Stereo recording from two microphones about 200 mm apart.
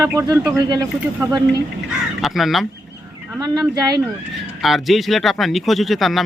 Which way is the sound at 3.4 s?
15° right (ahead or behind).